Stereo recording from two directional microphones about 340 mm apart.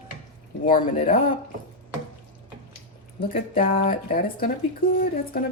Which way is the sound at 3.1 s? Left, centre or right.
Left.